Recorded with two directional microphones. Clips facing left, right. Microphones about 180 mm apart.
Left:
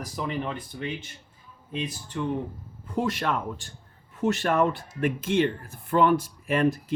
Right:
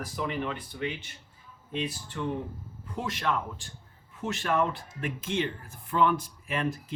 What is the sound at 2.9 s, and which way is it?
Speech, 55° left (ahead or behind).